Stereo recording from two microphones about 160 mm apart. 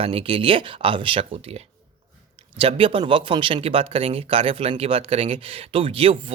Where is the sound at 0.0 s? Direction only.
35° right (ahead or behind).